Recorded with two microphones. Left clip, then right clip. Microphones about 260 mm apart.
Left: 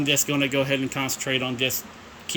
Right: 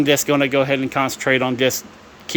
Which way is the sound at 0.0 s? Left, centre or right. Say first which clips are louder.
Right 7 dB; centre.